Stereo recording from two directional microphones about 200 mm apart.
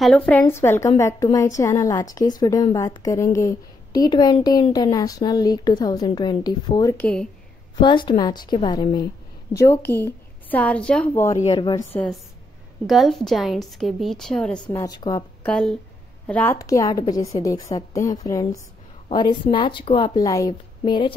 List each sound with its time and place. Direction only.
0.3 s a woman's voice: 10° left (ahead or behind)
7.8 s a woman's voice: 25° left (ahead or behind)
11.3 s a woman's voice: 25° left (ahead or behind)
11.9 s a woman's voice: 5° left (ahead or behind)
14.6 s a woman's voice: 20° left (ahead or behind)
15.4 s a woman's voice: 5° left (ahead or behind)
16.5 s a woman's voice: 15° left (ahead or behind)